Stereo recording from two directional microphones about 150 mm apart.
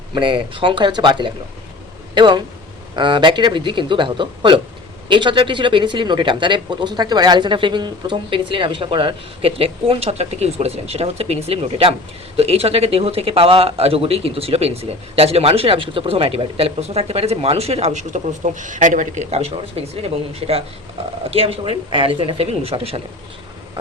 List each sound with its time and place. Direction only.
0.1 s speech: 30° right (ahead or behind)